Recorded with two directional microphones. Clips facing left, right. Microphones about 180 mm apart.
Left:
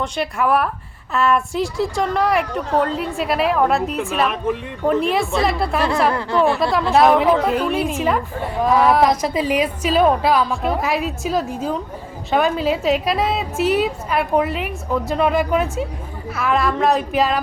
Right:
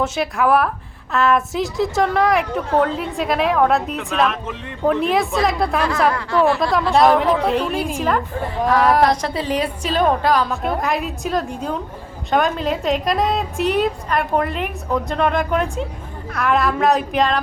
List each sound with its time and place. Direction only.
0.0 s a woman's voice: centre (ahead or behind)
6.1 s speech: 30° left (ahead or behind)
6.6 s a woman's voice: centre (ahead or behind)